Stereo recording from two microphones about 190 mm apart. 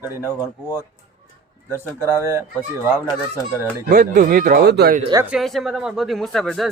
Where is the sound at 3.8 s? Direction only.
45° right (ahead or behind).